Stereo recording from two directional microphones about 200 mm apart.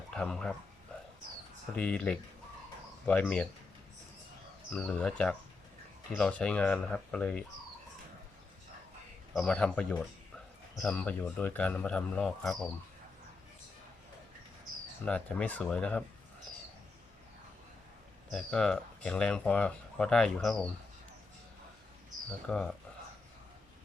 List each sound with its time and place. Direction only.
0.1 s speech: 5° left (ahead or behind)
1.7 s speech: 5° left (ahead or behind)
4.7 s speech: 5° left (ahead or behind)
9.3 s speech: centre (ahead or behind)
14.6 s speech: 5° left (ahead or behind)
18.3 s speech: centre (ahead or behind)
22.4 s speech: 5° left (ahead or behind)